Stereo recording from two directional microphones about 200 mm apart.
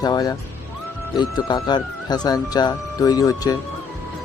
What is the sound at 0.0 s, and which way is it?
Speech, 20° left (ahead or behind).